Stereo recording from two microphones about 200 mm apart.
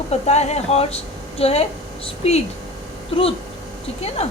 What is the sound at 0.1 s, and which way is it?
A woman's voice, 35° left (ahead or behind).